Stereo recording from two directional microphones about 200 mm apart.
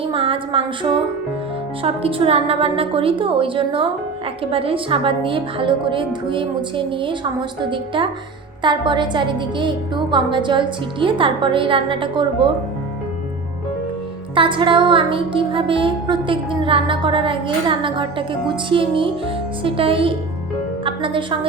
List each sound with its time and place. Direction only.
0.0 s music: 25° right (ahead or behind)
14.3 s music: 25° right (ahead or behind)
20.8 s a woman's voice: 25° right (ahead or behind)